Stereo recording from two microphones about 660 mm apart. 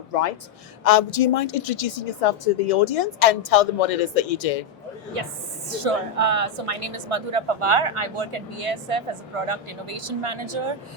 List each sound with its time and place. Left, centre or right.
0.9 s a woman's voice: left
5.2 s speech: right